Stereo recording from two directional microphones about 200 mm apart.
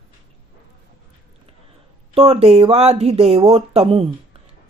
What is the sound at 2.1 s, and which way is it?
Speech, 30° right (ahead or behind).